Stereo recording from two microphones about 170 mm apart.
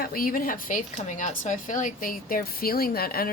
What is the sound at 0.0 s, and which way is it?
A woman's voice, 60° left (ahead or behind).